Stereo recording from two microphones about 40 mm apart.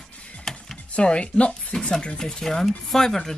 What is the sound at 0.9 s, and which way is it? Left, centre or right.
Speech, left.